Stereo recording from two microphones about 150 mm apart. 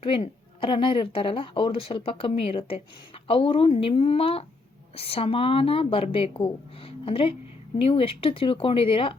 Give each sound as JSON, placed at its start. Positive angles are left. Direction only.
{"t": 0.0, "sound": "a woman's voice", "side_deg": 40}